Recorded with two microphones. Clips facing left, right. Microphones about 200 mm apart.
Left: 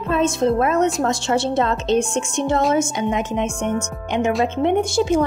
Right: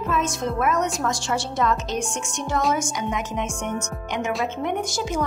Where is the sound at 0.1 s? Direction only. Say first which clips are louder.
Left 9 dB; 30° left (ahead or behind).